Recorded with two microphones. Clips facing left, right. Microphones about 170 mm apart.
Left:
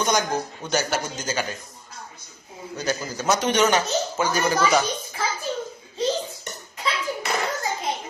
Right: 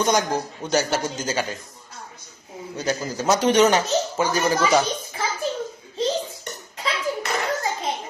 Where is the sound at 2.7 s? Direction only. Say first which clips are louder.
Right 2 dB; 30° right (ahead or behind).